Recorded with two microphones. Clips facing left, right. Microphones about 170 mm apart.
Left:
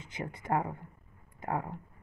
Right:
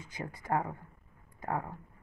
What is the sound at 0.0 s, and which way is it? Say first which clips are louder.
Speech: left 2 dB; 20° left (ahead or behind).